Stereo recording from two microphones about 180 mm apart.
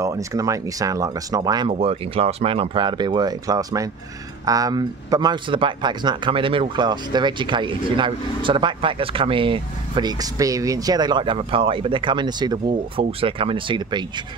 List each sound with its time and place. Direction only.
0.0 s speech: 20° right (ahead or behind)
1.7 s speech: 35° right (ahead or behind)